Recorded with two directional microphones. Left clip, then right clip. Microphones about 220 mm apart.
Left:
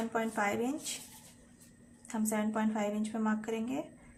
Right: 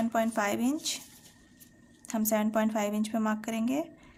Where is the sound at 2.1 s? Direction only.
55° right (ahead or behind).